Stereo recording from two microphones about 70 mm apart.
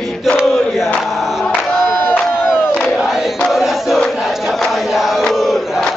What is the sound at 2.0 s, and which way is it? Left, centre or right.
Crowd, left.